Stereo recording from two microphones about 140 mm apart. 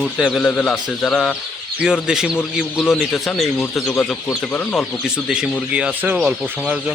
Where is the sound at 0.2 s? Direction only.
5° left (ahead or behind).